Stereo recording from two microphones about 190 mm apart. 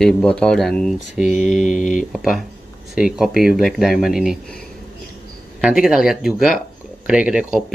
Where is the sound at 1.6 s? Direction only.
40° left (ahead or behind).